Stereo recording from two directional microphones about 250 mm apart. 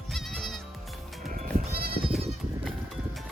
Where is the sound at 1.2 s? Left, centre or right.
Right.